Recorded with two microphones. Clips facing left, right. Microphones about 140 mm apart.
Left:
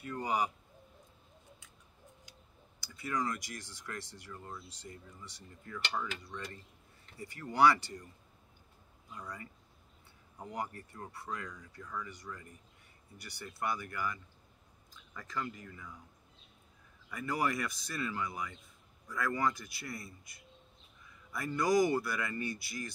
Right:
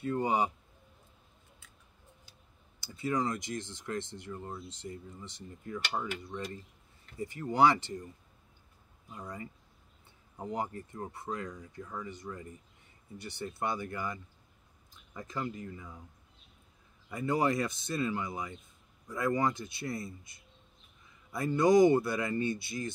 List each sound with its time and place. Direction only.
0.0 s a man's voice: 25° right (ahead or behind)
2.8 s speech: 25° right (ahead or behind)
9.1 s speech: 25° right (ahead or behind)
17.1 s speech: 25° right (ahead or behind)